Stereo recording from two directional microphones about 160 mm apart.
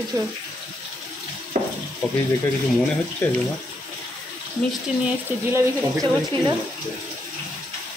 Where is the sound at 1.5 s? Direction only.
50° right (ahead or behind).